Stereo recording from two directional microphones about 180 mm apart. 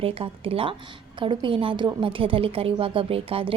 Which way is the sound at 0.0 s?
30° right (ahead or behind).